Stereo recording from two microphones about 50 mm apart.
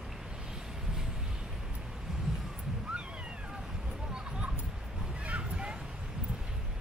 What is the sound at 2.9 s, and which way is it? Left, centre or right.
Cat, centre.